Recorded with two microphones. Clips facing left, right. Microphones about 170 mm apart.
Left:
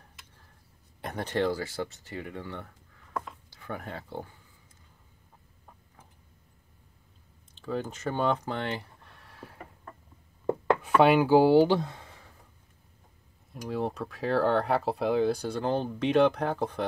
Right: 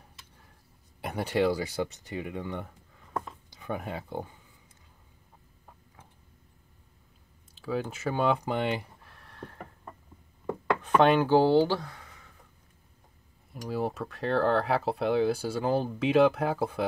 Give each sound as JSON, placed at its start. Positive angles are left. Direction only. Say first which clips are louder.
{"t": 1.0, "sound": "speech", "louder": "right 2 dB", "side_deg": -10}
{"t": 3.2, "sound": "a sound", "louder": "right 1 dB", "side_deg": -15}
{"t": 7.5, "sound": "speech", "louder": "right 1 dB", "side_deg": -5}
{"t": 9.0, "sound": "a sound", "louder": "right 3 dB", "side_deg": 0}
{"t": 11.0, "sound": "speech", "louder": "left 1 dB", "side_deg": 10}
{"t": 13.5, "sound": "speech", "louder": "even", "side_deg": 0}